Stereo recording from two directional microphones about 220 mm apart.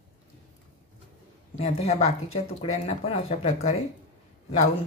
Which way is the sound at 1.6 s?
30° left (ahead or behind).